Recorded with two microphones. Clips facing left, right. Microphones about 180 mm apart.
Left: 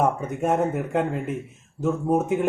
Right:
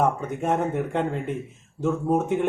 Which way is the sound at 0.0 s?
5° left (ahead or behind).